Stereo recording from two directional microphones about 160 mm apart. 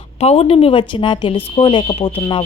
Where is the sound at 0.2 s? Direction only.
40° left (ahead or behind).